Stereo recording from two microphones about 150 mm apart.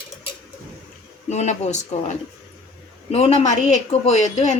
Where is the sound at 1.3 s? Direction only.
50° left (ahead or behind).